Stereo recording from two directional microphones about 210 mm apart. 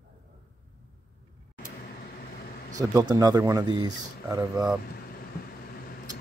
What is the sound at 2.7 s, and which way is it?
Speech, 15° right (ahead or behind).